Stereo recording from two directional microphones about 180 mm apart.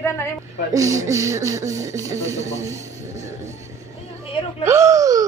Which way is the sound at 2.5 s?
15° right (ahead or behind).